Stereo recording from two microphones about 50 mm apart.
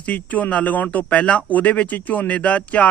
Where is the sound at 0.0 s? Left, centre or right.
Left.